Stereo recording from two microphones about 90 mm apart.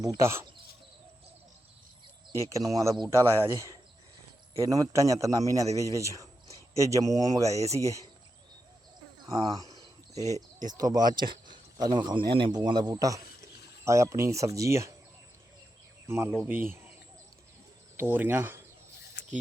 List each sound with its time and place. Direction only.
0.0 s a man's voice: 35° right (ahead or behind)
2.3 s a man's voice: 35° right (ahead or behind)
3.1 s a man's voice: 30° right (ahead or behind)
9.2 s speech: 55° right (ahead or behind)
10.2 s speech: 35° left (ahead or behind)
10.7 s speech: 45° right (ahead or behind)
12.9 s a man's voice: 40° right (ahead or behind)
16.0 s speech: 30° right (ahead or behind)
17.9 s speech: 25° right (ahead or behind)